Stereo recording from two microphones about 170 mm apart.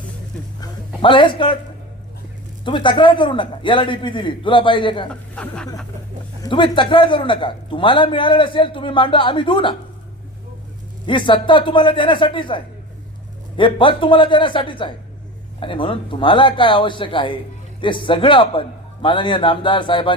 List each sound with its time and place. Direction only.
0.6 s a sound: 30° left (ahead or behind)
2.6 s a man's voice: 30° left (ahead or behind)
5.0 s speech: 5° left (ahead or behind)
6.4 s a man's voice: 30° left (ahead or behind)
11.0 s a man's voice: 30° left (ahead or behind)